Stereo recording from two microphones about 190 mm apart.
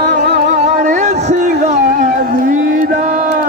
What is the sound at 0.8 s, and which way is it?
Music, 40° right (ahead or behind).